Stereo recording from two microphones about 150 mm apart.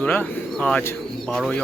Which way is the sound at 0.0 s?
10° left (ahead or behind).